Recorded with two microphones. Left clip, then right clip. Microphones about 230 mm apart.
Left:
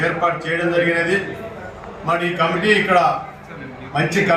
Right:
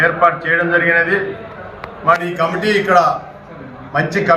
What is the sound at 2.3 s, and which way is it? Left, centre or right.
Speech, centre.